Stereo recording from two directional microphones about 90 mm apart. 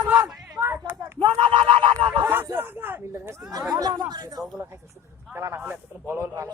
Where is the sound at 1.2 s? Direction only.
70° right (ahead or behind).